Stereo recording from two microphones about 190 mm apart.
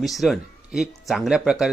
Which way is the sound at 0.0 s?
Centre (ahead or behind).